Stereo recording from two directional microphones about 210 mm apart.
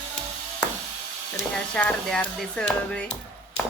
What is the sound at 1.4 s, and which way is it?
Speech, 5° left (ahead or behind).